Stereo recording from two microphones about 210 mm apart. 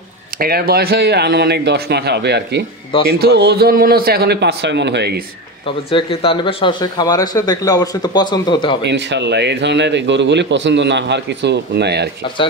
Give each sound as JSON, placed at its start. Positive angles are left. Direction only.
{"t": 0.4, "sound": "a man's voice", "side_deg": -45}
{"t": 5.9, "sound": "speech", "side_deg": 25}
{"t": 8.8, "sound": "a man's voice", "side_deg": -55}